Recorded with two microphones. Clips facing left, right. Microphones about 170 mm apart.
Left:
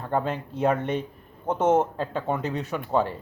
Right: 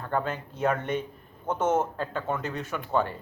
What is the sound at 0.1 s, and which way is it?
Speech, 30° left (ahead or behind).